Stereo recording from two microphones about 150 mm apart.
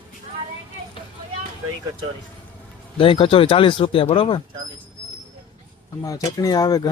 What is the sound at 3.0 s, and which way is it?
Speech, 35° left (ahead or behind).